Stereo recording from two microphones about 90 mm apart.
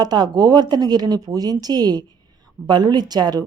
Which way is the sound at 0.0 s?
50° right (ahead or behind).